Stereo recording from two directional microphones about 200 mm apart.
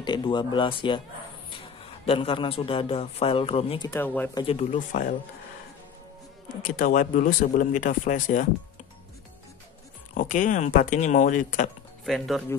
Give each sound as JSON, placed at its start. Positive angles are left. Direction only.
{"t": 0.0, "sound": "a man's voice", "side_deg": 25}
{"t": 2.0, "sound": "a man's voice", "side_deg": 25}
{"t": 3.9, "sound": "speech", "side_deg": 10}
{"t": 4.4, "sound": "speech", "side_deg": 30}
{"t": 6.6, "sound": "speech", "side_deg": 40}
{"t": 10.1, "sound": "speech", "side_deg": 40}
{"t": 12.1, "sound": "speech", "side_deg": 0}